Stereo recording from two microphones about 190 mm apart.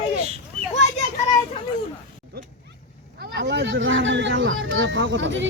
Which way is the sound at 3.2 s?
65° right (ahead or behind).